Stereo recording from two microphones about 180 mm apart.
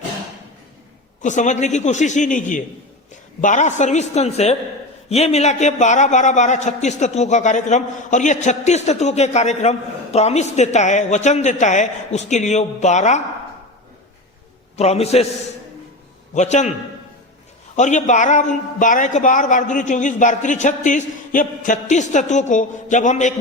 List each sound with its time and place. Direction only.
1.2 s a man's voice: 40° left (ahead or behind)
14.8 s a man's voice: 35° left (ahead or behind)
16.3 s a man's voice: 40° left (ahead or behind)
17.7 s a man's voice: 40° left (ahead or behind)